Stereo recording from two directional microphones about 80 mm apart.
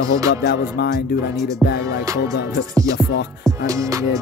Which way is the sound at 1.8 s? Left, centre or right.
Right.